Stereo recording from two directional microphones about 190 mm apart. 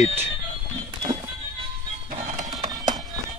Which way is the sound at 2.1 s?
35° right (ahead or behind).